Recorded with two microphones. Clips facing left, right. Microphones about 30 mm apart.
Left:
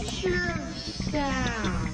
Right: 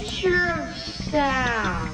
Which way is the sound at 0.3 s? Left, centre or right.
Right.